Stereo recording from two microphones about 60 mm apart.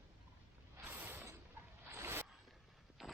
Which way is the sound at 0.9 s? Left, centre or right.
Right.